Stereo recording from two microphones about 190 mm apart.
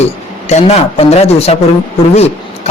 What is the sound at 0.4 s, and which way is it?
A man's voice, 35° left (ahead or behind).